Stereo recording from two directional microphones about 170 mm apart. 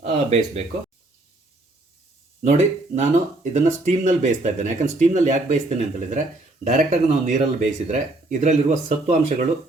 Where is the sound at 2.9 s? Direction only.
45° right (ahead or behind).